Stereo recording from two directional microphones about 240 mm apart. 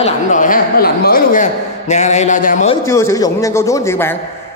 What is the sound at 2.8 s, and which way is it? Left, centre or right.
Speech, centre.